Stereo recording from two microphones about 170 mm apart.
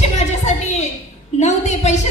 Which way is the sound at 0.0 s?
40° left (ahead or behind).